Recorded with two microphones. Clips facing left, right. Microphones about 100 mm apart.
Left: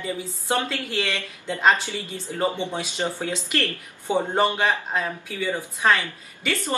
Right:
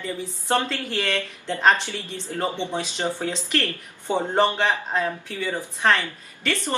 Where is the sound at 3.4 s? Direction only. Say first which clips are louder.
Right 1 dB; 15° left (ahead or behind).